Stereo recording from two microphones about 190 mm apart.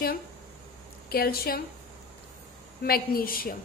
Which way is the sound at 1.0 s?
55° left (ahead or behind).